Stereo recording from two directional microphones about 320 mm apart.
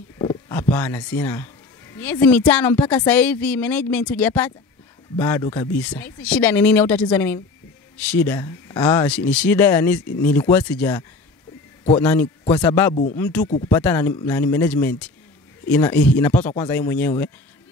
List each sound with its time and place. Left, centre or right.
0.2 s speech: centre
12.9 s speech: left
13.2 s speech: centre